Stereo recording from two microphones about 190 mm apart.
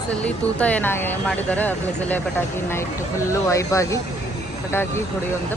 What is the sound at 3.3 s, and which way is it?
Speech, 15° left (ahead or behind).